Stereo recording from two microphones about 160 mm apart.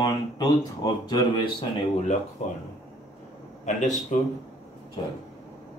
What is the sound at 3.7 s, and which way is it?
Speech, 50° left (ahead or behind).